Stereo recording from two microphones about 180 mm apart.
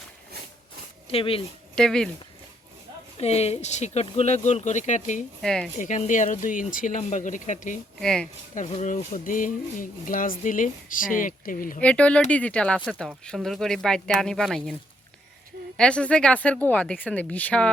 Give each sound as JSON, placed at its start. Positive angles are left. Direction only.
{"t": 1.0, "sound": "speech", "side_deg": 30}
{"t": 1.7, "sound": "speech", "side_deg": 5}
{"t": 3.2, "sound": "speech", "side_deg": 35}
{"t": 5.4, "sound": "speech", "side_deg": 5}
{"t": 5.7, "sound": "speech", "side_deg": 45}
{"t": 7.9, "sound": "speech", "side_deg": 5}
{"t": 8.5, "sound": "speech", "side_deg": 40}
{"t": 11.8, "sound": "speech", "side_deg": 5}
{"t": 15.8, "sound": "speech", "side_deg": 5}